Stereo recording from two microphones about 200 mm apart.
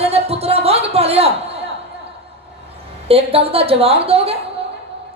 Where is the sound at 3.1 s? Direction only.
30° right (ahead or behind).